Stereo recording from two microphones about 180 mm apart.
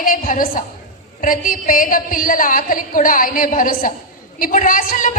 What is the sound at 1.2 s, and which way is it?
A woman's voice, 50° left (ahead or behind).